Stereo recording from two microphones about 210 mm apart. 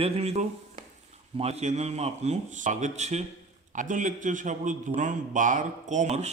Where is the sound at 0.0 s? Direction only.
30° right (ahead or behind).